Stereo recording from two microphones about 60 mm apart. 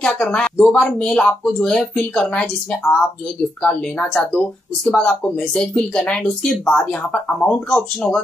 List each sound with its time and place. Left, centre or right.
0.0 s speech: centre